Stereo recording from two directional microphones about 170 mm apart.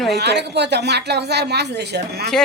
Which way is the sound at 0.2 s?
80° right.